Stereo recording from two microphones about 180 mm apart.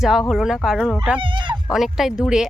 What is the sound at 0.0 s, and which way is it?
Speech, centre (ahead or behind).